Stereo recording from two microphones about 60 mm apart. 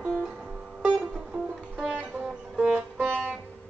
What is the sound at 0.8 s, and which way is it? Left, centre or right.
Music, centre.